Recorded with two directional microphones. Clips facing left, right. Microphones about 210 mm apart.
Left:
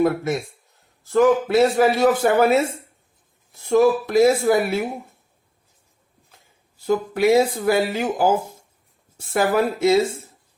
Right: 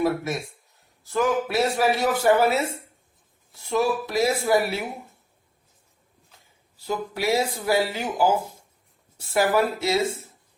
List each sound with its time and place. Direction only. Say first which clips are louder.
1.1 s speech: left 7 dB; 55° left (ahead or behind)
3.7 s speech: left 7 dB; 50° left (ahead or behind)
6.8 s speech: left 8 dB; 50° left (ahead or behind)